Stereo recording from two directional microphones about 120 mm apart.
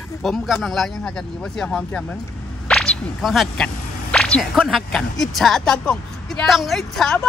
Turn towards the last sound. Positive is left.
turn(degrees=0)  # may be behind; listen again after turning